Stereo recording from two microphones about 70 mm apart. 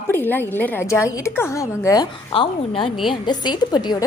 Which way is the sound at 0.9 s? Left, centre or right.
Left.